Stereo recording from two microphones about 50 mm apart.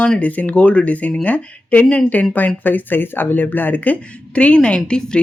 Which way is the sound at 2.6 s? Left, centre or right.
Left.